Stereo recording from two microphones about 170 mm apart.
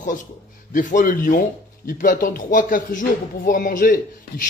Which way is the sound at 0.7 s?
50° left (ahead or behind).